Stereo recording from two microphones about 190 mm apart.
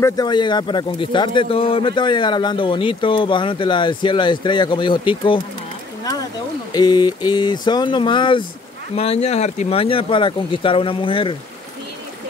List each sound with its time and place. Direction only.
0.0 s a man's voice: 20° left (ahead or behind)
6.7 s a man's voice: 20° left (ahead or behind)